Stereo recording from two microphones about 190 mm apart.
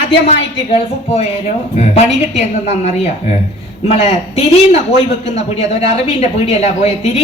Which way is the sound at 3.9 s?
35° left (ahead or behind).